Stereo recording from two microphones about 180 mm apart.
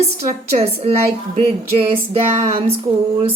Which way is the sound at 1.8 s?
30° right (ahead or behind).